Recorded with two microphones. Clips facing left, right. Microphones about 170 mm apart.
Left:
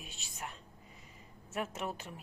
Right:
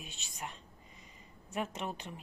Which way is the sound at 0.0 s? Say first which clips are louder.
Right 1 dB; 5° left (ahead or behind).